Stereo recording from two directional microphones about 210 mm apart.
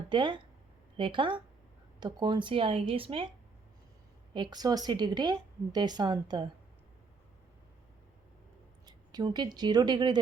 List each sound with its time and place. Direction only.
0.1 s a woman's voice: 20° right (ahead or behind)
4.4 s a woman's voice: 20° right (ahead or behind)
8.9 s speech: 20° right (ahead or behind)